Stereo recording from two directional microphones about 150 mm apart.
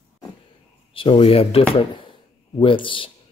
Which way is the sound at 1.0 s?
35° left (ahead or behind).